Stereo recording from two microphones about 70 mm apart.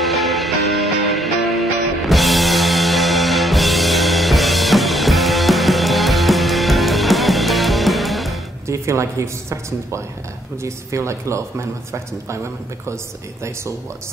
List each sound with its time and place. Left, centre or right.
0.0 s music: centre
8.6 s speech: right
12.9 s speech: right